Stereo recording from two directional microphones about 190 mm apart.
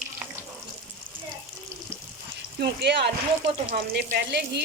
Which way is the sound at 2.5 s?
60° right (ahead or behind).